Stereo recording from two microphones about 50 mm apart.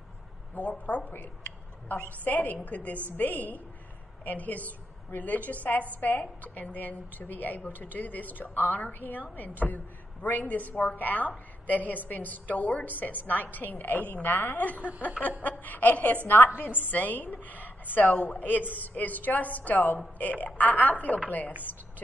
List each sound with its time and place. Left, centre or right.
0.6 s a woman's voice: left
1.9 s a woman's voice: left
10.2 s a woman's voice: left